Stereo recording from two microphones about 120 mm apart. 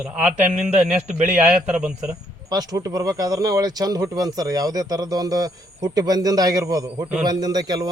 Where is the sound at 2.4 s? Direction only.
30° right (ahead or behind).